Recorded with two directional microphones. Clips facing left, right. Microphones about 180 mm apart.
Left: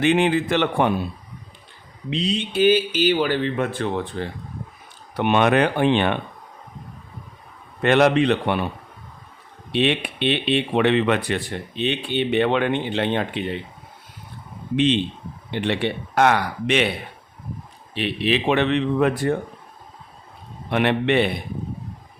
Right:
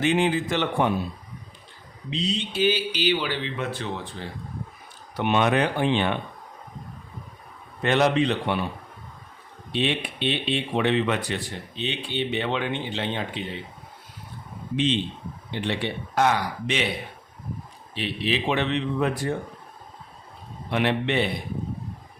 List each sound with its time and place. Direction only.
0.0 s speech: 65° left (ahead or behind)
2.0 s speech: 60° left (ahead or behind)
7.8 s speech: 60° left (ahead or behind)
9.7 s speech: 65° left (ahead or behind)
15.5 s speech: 65° left (ahead or behind)
17.9 s speech: 65° left (ahead or behind)
20.7 s speech: 60° left (ahead or behind)